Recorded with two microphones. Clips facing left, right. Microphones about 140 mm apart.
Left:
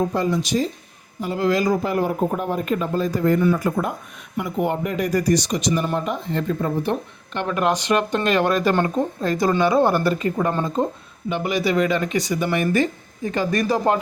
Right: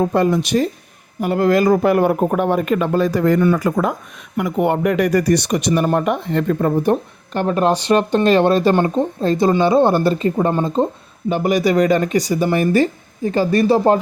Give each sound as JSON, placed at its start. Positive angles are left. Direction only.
{"t": 0.0, "sound": "speech", "side_deg": -60}
{"t": 4.4, "sound": "speech", "side_deg": -70}
{"t": 7.3, "sound": "speech", "side_deg": -35}
{"t": 11.3, "sound": "speech", "side_deg": -40}